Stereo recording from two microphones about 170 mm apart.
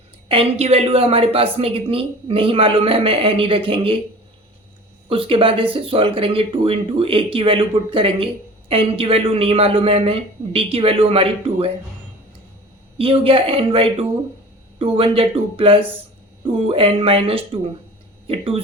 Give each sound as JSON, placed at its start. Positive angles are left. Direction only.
{"t": 0.3, "sound": "a woman's voice", "side_deg": -35}
{"t": 5.0, "sound": "a woman's voice", "side_deg": -30}
{"t": 13.0, "sound": "a woman's voice", "side_deg": -35}